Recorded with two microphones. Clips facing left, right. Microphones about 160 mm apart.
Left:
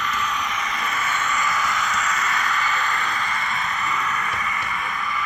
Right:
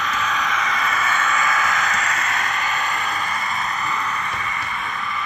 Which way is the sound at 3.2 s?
40° right (ahead or behind).